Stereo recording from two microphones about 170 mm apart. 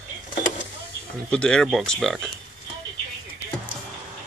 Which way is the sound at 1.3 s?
5° left (ahead or behind).